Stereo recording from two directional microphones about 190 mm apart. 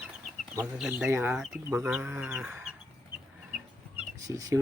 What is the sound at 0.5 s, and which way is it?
Speech, 10° right (ahead or behind).